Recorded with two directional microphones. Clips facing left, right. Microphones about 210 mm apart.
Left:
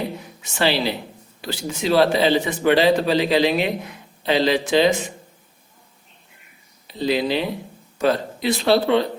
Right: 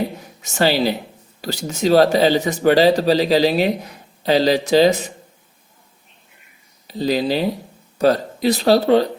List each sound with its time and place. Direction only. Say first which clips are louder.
0.4 s speech: right 4 dB; 40° right (ahead or behind)
6.8 s speech: right 2 dB; 40° right (ahead or behind)